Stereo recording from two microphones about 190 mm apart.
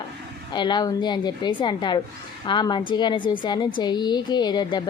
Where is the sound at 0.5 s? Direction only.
25° left (ahead or behind).